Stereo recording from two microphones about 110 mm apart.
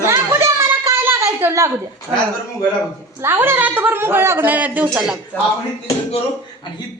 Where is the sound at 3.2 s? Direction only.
20° right (ahead or behind).